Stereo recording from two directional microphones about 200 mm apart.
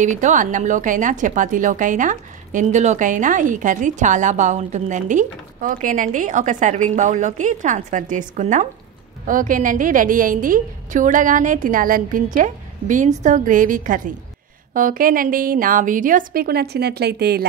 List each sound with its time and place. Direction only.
0.0 s a woman's voice: 40° right (ahead or behind)